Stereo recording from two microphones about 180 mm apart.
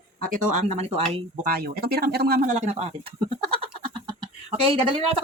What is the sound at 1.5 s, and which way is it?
Speech, 55° right (ahead or behind).